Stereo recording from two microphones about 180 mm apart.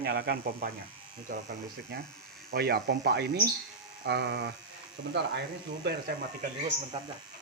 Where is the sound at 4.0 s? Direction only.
85° right.